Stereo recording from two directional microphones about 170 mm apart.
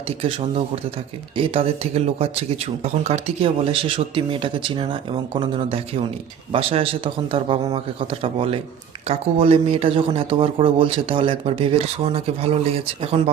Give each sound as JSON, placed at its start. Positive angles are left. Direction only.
{"t": 0.2, "sound": "speech", "side_deg": -35}